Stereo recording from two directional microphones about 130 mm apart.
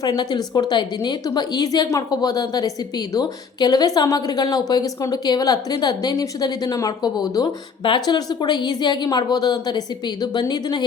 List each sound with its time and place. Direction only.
0.0 s speech: 30° left (ahead or behind)